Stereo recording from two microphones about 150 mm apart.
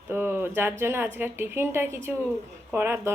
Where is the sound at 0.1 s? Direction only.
15° right (ahead or behind).